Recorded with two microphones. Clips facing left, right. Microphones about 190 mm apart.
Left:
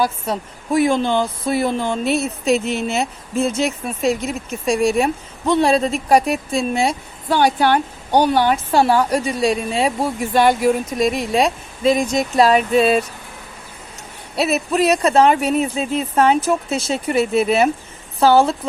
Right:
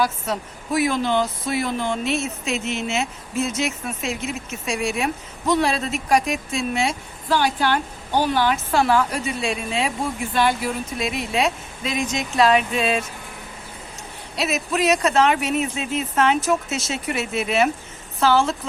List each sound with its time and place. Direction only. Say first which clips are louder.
0.0 s a woman's voice: left 3 dB; 30° left (ahead or behind)
7.3 s a woman's voice: left 5 dB; 55° left (ahead or behind)
8.5 s speech: left 3 dB; 30° left (ahead or behind)
11.0 s speech: left 8 dB; centre (ahead or behind)
11.3 s speech: left 4 dB; 35° left (ahead or behind)
14.5 s speech: left 3 dB; 35° left (ahead or behind)